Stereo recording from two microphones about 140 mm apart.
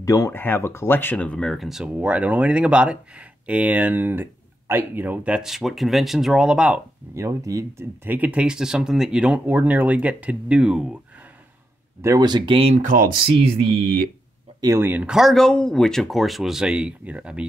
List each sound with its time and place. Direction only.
0.0 s speech: 25° left (ahead or behind); by 6.8 s 5° right (ahead or behind)
7.2 s speech: 20° right (ahead or behind)
12.0 s speech: 25° right (ahead or behind)
12.5 s speech: 45° right (ahead or behind)
12.8 s speech: 80° right
14.6 s speech: 20° right (ahead or behind)